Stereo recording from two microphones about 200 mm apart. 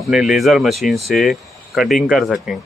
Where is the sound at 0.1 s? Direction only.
Centre (ahead or behind).